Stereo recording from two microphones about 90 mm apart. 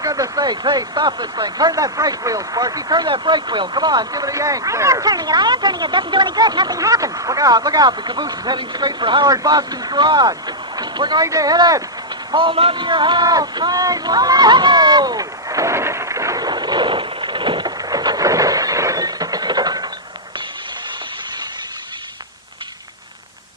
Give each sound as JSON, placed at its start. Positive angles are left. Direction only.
{"t": 0.0, "sound": "speech", "side_deg": -40}
{"t": 9.3, "sound": "speech", "side_deg": -45}
{"t": 11.3, "sound": "speech", "side_deg": -40}
{"t": 12.3, "sound": "a man's voice", "side_deg": -65}
{"t": 13.2, "sound": "speech", "side_deg": -45}
{"t": 16.5, "sound": "a sound", "side_deg": -55}
{"t": 17.7, "sound": "a sound", "side_deg": -45}